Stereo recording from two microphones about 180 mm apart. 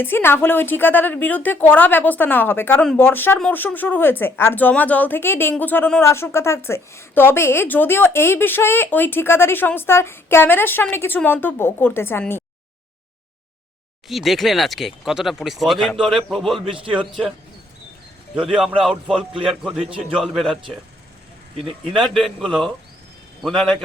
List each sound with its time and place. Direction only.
0.0 s a woman's voice: 10° left (ahead or behind)
14.1 s speech: centre (ahead or behind)
16.7 s a man's voice: 30° right (ahead or behind)
17.1 s speech: 5° right (ahead or behind)
18.5 s speech: centre (ahead or behind)
21.5 s speech: 30° right (ahead or behind)
22.0 s speech: centre (ahead or behind)